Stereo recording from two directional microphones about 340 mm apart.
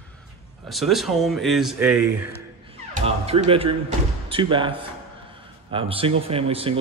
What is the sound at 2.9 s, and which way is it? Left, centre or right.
Speech, centre.